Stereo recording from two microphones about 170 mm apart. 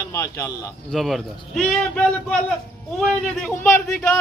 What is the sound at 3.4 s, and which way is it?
Speech, 5° left (ahead or behind).